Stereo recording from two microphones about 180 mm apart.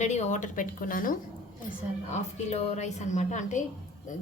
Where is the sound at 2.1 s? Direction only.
35° left (ahead or behind).